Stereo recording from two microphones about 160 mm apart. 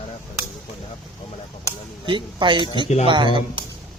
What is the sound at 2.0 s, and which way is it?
Speech, 30° right (ahead or behind).